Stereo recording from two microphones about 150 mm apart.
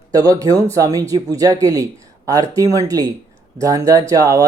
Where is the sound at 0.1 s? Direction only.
25° right (ahead or behind).